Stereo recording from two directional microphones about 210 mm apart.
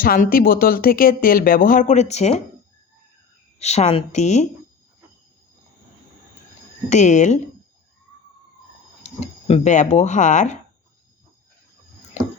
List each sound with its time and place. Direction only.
0.0 s speech: 45° left (ahead or behind)
3.6 s speech: 30° left (ahead or behind)
6.9 s speech: 35° left (ahead or behind)
9.0 s a sound: 30° left (ahead or behind)
9.5 s speech: 35° left (ahead or behind)